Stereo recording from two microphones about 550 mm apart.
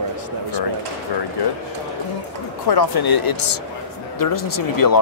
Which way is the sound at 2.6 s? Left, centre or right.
Left.